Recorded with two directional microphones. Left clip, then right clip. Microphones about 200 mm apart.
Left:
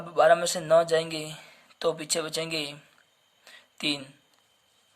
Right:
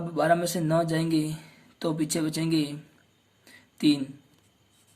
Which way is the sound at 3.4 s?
25° left (ahead or behind).